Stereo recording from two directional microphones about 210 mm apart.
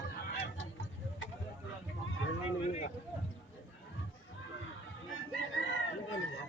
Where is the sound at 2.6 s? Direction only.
30° left (ahead or behind).